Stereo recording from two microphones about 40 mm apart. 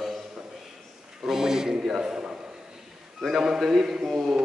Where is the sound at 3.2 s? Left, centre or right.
Centre.